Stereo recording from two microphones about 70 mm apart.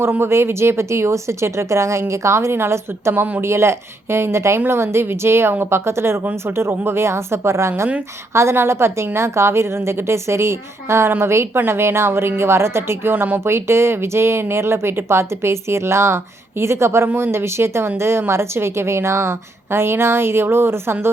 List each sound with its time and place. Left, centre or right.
0.0 s speech: right